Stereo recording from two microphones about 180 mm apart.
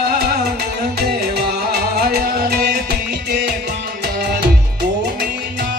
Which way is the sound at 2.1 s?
55° right (ahead or behind).